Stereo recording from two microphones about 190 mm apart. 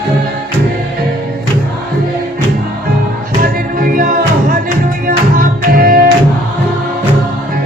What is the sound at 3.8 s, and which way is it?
Music, 50° right (ahead or behind).